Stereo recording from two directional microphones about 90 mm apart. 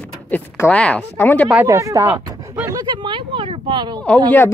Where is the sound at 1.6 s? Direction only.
35° right (ahead or behind).